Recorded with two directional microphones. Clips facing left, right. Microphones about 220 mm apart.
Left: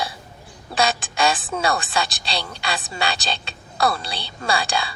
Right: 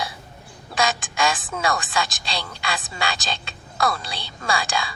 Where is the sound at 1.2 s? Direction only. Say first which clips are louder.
Left 3 dB; 35° left (ahead or behind).